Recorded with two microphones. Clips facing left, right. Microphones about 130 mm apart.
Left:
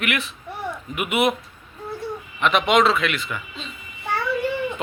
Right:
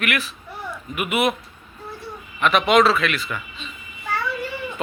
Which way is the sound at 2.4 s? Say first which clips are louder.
Right 1 dB; 20° left (ahead or behind).